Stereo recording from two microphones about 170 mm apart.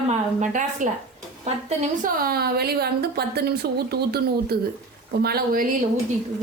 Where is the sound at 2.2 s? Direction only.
65° right (ahead or behind).